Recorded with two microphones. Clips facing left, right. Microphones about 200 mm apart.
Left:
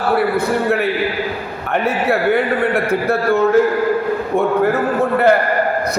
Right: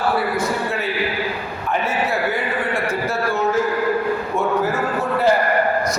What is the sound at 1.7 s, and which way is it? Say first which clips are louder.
A man's voice: left 5 dB; 60° left (ahead or behind).